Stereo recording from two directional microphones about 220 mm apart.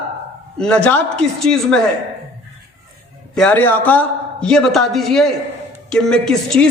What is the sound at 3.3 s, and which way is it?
A woman's voice, 5° left (ahead or behind).